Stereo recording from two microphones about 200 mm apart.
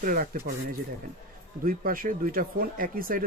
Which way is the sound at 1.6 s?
45° right (ahead or behind).